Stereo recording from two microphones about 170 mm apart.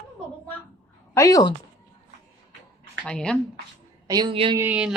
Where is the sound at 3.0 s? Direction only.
5° left (ahead or behind).